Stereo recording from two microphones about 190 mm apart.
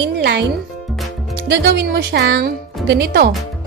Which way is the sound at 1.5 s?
60° right (ahead or behind).